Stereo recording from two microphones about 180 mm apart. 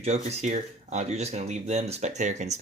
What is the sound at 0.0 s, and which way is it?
Speech, 35° right (ahead or behind).